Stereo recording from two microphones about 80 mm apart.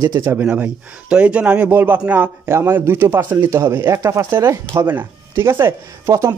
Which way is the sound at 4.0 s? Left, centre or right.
Right.